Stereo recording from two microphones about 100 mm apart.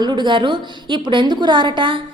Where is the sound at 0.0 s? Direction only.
50° right (ahead or behind).